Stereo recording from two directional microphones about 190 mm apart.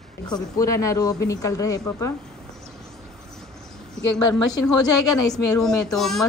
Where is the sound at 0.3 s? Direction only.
15° left (ahead or behind).